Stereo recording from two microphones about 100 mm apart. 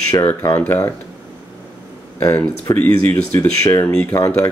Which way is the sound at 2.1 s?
25° left (ahead or behind).